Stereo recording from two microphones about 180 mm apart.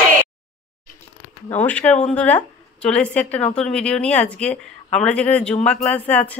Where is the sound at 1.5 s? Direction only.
10° left (ahead or behind).